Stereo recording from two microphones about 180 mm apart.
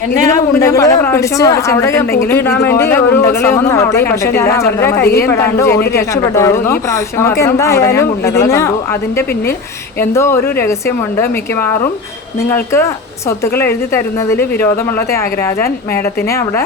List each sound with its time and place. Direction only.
0.7 s speech: 15° left (ahead or behind)
4.9 s a woman's voice: 60° left (ahead or behind)
5.2 s speech: 15° left (ahead or behind)